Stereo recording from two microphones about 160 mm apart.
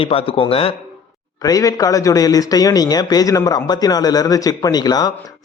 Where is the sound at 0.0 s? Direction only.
35° left (ahead or behind).